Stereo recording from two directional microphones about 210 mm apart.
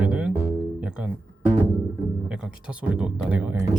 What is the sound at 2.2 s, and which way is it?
Speech, 5° right (ahead or behind).